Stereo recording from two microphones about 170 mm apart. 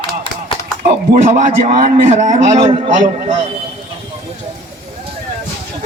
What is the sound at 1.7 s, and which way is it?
Speech, 40° right (ahead or behind).